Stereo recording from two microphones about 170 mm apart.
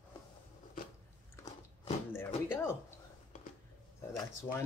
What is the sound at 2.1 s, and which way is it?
Door, 15° left (ahead or behind).